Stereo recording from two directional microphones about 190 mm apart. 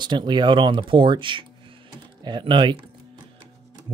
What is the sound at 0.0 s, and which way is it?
Speech, 25° right (ahead or behind).